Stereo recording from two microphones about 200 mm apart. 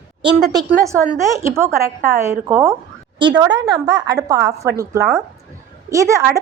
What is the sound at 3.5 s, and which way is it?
A woman's voice, 20° right (ahead or behind).